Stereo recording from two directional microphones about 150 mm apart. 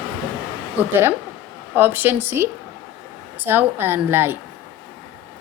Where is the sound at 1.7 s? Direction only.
15° right (ahead or behind).